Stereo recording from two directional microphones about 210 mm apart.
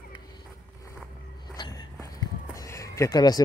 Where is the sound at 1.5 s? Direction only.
20° left (ahead or behind).